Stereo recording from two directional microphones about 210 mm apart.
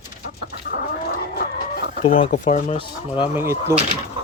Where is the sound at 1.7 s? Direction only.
45° left (ahead or behind).